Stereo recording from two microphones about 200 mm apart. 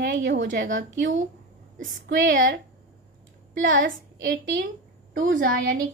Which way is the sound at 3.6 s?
45° right (ahead or behind).